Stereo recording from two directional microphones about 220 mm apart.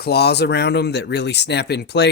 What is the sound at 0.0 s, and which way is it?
Speech, 45° left (ahead or behind).